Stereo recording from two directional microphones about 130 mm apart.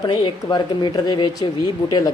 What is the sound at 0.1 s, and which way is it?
Speech, 30° left (ahead or behind).